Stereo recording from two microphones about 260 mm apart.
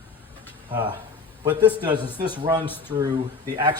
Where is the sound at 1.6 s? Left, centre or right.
Centre.